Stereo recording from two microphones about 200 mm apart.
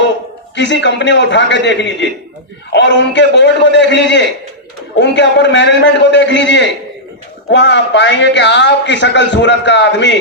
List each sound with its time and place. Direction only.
0.5 s a man's voice: 60° left (ahead or behind)